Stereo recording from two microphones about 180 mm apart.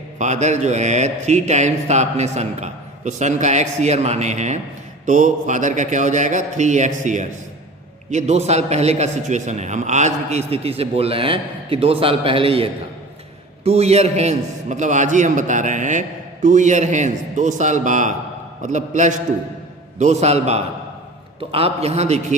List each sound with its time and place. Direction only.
0.2 s a man's voice: 40° right (ahead or behind)